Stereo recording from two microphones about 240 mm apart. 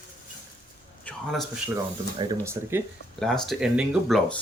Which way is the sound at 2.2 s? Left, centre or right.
Centre.